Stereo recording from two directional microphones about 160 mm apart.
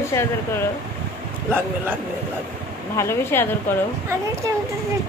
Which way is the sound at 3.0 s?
15° left (ahead or behind).